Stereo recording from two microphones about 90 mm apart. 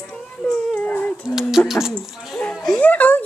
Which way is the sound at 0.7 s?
15° left (ahead or behind).